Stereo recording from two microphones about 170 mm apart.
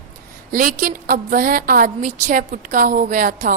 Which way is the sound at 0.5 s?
55° right (ahead or behind).